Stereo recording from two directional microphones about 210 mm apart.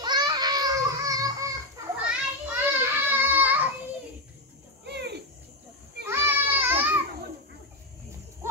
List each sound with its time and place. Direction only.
0.0 s a sound: 20° right (ahead or behind)
2.0 s children playing: 5° right (ahead or behind)
4.8 s cricket: 55° right (ahead or behind)
6.0 s children playing: 10° right (ahead or behind)